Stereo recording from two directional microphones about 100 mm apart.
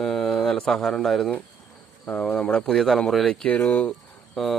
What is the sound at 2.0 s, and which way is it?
Speech, 15° left (ahead or behind).